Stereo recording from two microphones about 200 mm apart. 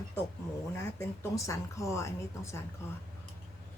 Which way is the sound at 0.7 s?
15° left (ahead or behind).